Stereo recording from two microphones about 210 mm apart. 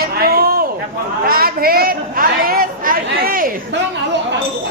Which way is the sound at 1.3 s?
45° right (ahead or behind).